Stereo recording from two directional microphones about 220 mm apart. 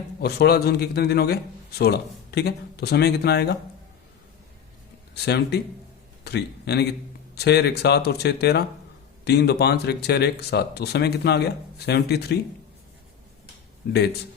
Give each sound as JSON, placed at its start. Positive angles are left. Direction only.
{"t": 0.2, "sound": "speech", "side_deg": 45}
{"t": 5.1, "sound": "a man's voice", "side_deg": 50}
{"t": 13.8, "sound": "speech", "side_deg": 45}